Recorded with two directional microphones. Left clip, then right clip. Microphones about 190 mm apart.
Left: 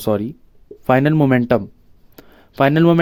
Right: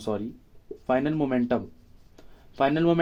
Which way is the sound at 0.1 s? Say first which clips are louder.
Left 11 dB; 60° left (ahead or behind).